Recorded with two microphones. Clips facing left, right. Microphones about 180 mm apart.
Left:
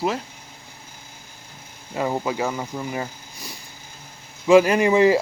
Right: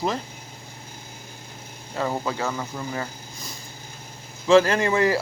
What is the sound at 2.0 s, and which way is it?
Speech, 15° left (ahead or behind).